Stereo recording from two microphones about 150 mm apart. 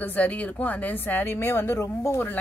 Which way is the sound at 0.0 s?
10° left (ahead or behind).